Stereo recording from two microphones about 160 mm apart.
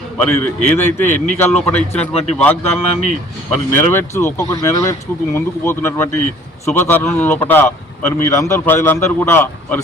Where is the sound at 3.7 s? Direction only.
15° left (ahead or behind).